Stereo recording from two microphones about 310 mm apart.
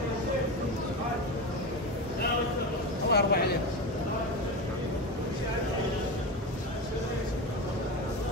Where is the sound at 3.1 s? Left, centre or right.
Left.